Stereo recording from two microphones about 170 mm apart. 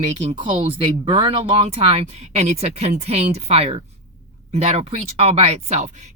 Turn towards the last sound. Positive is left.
turn(degrees=-40)  # may be behind; listen again after turning